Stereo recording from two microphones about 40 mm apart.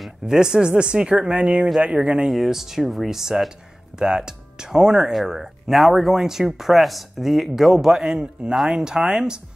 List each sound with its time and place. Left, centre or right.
0.3 s speech: centre
2.3 s speech: centre
5.3 s speech: centre